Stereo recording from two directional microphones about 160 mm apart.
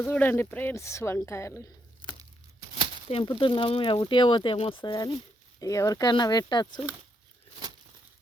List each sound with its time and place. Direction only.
0.0 s a woman's voice: 10° left (ahead or behind)
3.1 s speech: 30° left (ahead or behind)